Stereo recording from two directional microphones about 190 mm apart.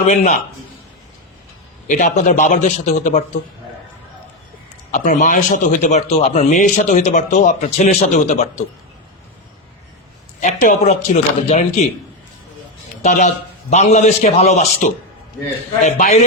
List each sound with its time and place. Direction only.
0.0 s a man's voice: 40° left (ahead or behind)
1.9 s a man's voice: 40° left (ahead or behind)
4.9 s a man's voice: 40° left (ahead or behind)
10.4 s a man's voice: 40° left (ahead or behind)
13.0 s a man's voice: 35° left (ahead or behind)